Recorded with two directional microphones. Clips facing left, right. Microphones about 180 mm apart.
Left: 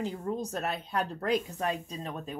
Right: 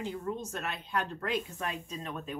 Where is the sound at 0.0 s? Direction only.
35° left (ahead or behind).